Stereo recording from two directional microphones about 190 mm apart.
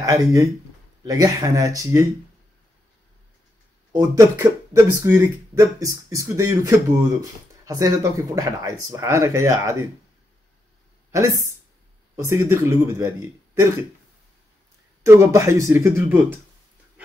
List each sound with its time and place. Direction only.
0.0 s speech: 15° right (ahead or behind)
3.9 s speech: 15° right (ahead or behind)
12.3 s speech: 15° right (ahead or behind)
15.0 s speech: 15° right (ahead or behind)